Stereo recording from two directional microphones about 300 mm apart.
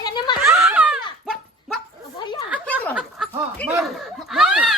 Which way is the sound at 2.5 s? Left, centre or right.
Centre.